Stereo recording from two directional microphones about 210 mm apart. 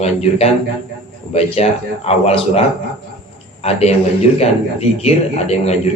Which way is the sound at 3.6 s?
30° left (ahead or behind).